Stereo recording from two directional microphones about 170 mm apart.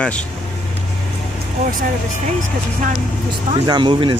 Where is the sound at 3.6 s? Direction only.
25° right (ahead or behind).